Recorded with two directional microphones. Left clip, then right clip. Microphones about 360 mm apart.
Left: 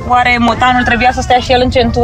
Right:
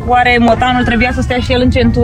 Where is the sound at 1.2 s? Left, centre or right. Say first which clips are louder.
Left 4 dB; left.